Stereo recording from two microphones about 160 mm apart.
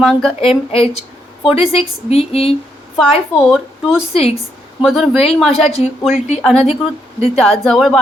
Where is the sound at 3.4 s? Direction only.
5° right (ahead or behind).